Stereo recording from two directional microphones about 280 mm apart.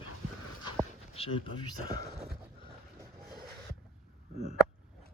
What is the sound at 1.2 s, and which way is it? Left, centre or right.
Speech, centre.